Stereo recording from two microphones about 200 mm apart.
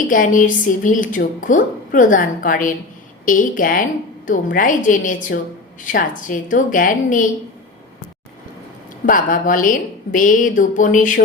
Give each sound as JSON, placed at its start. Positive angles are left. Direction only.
{"t": 0.1, "sound": "a woman's voice", "side_deg": 40}
{"t": 9.0, "sound": "a woman's voice", "side_deg": 45}